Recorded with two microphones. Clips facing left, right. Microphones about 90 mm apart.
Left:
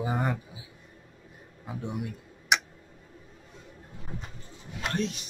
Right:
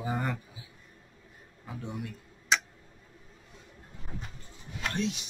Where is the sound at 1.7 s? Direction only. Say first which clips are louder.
Left 4 dB; 15° left (ahead or behind).